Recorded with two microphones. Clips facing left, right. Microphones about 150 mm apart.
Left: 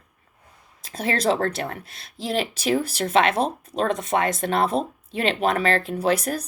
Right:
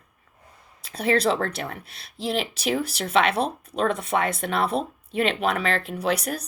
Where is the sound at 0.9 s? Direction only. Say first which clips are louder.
Right 1 dB; 45° left (ahead or behind).